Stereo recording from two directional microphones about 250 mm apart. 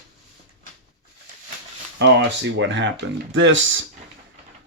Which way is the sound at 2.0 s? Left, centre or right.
Right.